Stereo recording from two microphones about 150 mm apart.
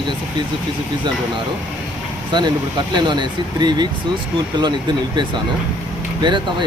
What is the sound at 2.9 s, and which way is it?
Speech, 30° right (ahead or behind).